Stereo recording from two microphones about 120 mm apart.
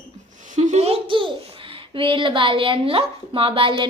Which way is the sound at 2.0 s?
45° right (ahead or behind).